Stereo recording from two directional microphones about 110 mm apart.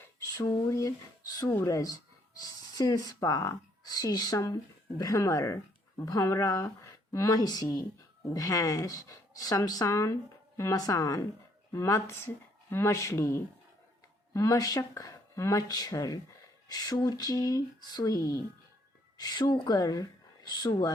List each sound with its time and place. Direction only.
0.0 s speech: 30° left (ahead or behind)